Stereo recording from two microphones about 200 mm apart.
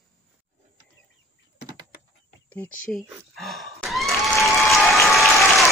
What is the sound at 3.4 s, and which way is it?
Gasp, centre (ahead or behind).